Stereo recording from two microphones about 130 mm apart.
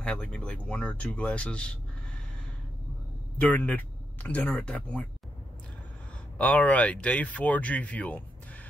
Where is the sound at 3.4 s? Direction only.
10° left (ahead or behind).